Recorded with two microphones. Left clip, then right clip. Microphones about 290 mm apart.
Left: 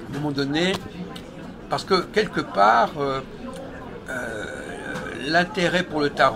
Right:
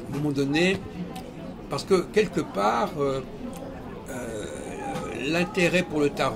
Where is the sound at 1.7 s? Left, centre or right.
Centre.